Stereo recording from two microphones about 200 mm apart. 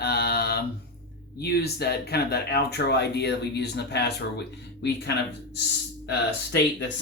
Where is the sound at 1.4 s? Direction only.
55° left (ahead or behind).